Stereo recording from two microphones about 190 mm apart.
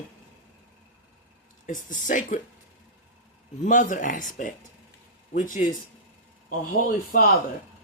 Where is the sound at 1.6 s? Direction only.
40° left (ahead or behind).